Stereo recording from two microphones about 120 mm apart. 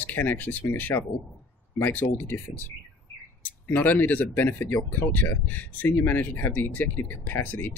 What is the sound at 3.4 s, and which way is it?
Speech, 15° left (ahead or behind).